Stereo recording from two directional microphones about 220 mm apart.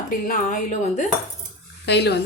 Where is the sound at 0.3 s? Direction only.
35° left (ahead or behind).